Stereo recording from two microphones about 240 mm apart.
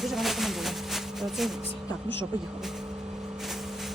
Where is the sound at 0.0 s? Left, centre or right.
Centre.